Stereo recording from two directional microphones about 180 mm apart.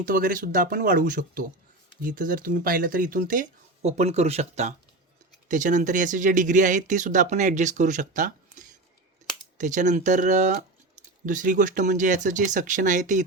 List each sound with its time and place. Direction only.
0.0 s speech: 50° right (ahead or behind)